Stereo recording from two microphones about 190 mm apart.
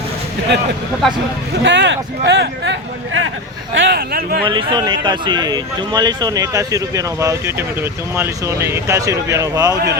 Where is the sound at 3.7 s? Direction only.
65° right (ahead or behind).